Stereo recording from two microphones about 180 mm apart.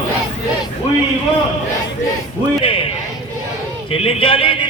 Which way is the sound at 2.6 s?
30° left (ahead or behind).